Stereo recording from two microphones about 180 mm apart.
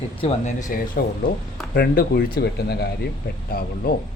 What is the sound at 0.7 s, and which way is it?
Speech, 50° left (ahead or behind).